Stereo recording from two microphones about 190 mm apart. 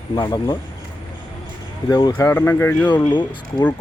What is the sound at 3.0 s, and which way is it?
Speech, 25° left (ahead or behind).